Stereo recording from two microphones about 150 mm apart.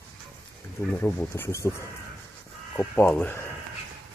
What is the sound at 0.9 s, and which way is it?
Speech, 15° left (ahead or behind).